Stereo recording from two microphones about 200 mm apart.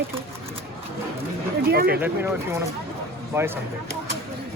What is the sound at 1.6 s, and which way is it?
Speech, 50° right (ahead or behind).